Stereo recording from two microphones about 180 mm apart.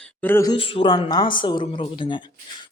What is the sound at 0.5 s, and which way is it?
Speech, 30° left (ahead or behind).